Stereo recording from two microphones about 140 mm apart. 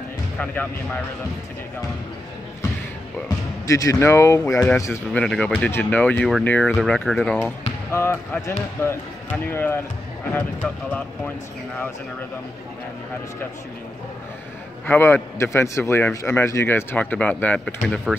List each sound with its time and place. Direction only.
3.6 s speech: 25° left (ahead or behind)
5.1 s a man's voice: 5° left (ahead or behind)
7.9 s a man's voice: 20° left (ahead or behind)
14.9 s a man's voice: 15° left (ahead or behind)